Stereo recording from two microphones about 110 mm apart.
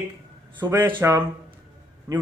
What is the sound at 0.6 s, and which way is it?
Speech, 20° right (ahead or behind).